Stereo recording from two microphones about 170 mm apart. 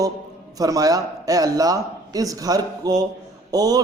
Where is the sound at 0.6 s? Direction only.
20° right (ahead or behind).